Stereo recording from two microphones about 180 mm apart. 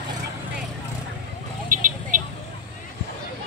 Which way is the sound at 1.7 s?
50° right (ahead or behind).